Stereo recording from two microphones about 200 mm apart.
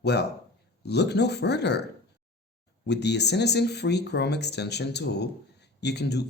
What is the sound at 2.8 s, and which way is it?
Speech, 55° left (ahead or behind).